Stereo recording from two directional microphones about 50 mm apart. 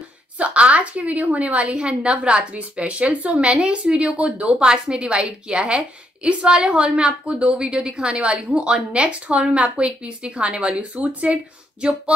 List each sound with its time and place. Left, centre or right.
0.4 s a woman's voice: right